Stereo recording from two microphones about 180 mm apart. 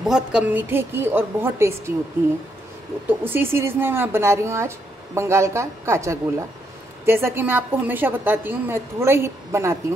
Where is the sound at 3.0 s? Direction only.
10° right (ahead or behind).